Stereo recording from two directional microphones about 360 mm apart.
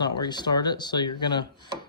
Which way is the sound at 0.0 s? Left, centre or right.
Centre.